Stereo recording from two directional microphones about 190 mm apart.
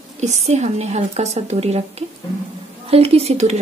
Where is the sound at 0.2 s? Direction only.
35° right (ahead or behind).